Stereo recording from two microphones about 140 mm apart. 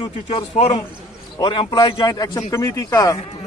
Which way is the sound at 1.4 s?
35° left (ahead or behind).